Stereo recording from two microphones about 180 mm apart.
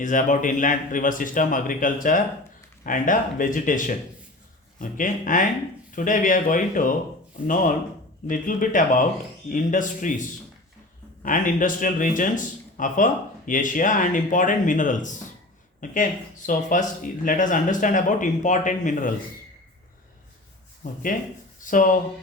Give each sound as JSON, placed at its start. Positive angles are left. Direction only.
{"t": 0.0, "sound": "speech", "side_deg": 45}
{"t": 20.8, "sound": "speech", "side_deg": 45}